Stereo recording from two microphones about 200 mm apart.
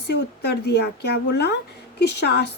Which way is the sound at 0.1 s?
55° left (ahead or behind).